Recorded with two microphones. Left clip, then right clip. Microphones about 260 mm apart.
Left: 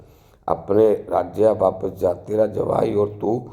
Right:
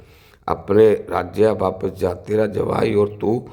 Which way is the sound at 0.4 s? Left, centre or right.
Right.